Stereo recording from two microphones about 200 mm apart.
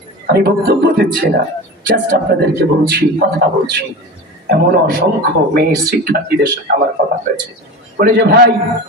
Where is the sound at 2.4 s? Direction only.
55° right (ahead or behind).